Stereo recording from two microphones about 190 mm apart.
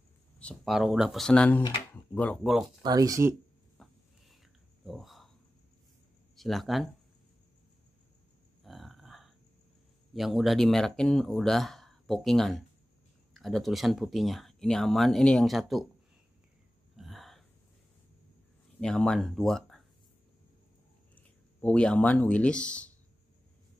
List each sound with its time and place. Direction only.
0.4 s speech: 5° left (ahead or behind)
2.8 s speech: 20° right (ahead or behind)
3.7 s a sound: centre (ahead or behind)
6.3 s speech: centre (ahead or behind)
8.6 s burping: centre (ahead or behind)
10.1 s speech: centre (ahead or behind)
16.9 s hiccup: centre (ahead or behind)
18.8 s speech: 5° left (ahead or behind)
21.1 s speech: 5° left (ahead or behind)